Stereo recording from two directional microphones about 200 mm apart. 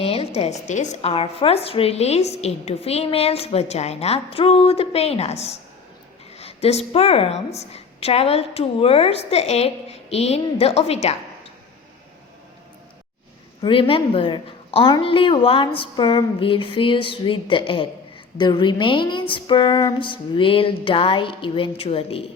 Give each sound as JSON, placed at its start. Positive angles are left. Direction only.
{"t": 0.0, "sound": "a sound", "side_deg": 30}
{"t": 0.3, "sound": "a woman's voice", "side_deg": 35}
{"t": 13.6, "sound": "a woman's voice", "side_deg": 25}